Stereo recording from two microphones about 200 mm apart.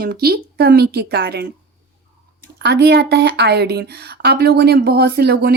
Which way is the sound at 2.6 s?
55° right (ahead or behind).